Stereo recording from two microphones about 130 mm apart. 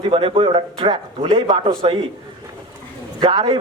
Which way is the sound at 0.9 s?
30° right (ahead or behind).